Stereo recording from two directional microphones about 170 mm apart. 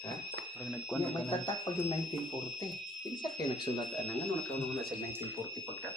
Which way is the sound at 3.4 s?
25° left (ahead or behind).